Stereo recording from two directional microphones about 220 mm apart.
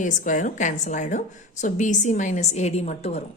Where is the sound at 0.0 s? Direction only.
35° left (ahead or behind).